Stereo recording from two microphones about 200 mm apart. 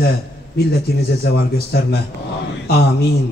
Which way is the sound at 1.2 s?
50° left (ahead or behind).